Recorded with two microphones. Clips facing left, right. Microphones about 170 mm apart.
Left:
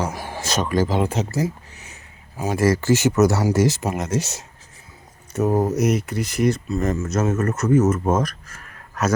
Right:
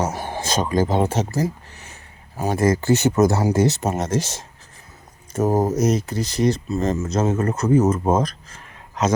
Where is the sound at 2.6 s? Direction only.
25° right (ahead or behind).